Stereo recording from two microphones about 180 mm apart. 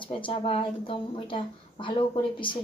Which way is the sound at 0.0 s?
30° left (ahead or behind).